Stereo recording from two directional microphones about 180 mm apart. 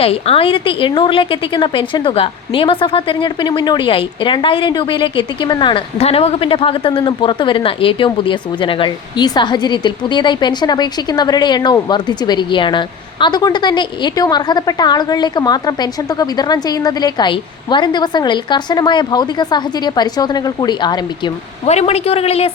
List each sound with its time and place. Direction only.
0.0 s a woman's voice: 30° left (ahead or behind)
21.7 s a man's voice: 35° left (ahead or behind)